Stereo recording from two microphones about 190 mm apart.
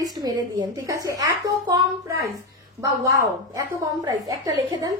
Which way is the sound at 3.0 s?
15° right (ahead or behind).